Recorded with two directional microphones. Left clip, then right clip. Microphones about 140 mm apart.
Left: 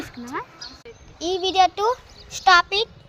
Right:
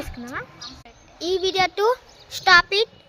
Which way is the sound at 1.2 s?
10° right (ahead or behind).